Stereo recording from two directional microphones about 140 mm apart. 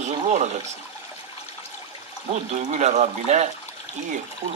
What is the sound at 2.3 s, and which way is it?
Speech, 50° right (ahead or behind).